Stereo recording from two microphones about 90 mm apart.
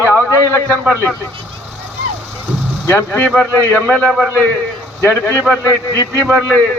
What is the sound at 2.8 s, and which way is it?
A man's voice, 25° left (ahead or behind).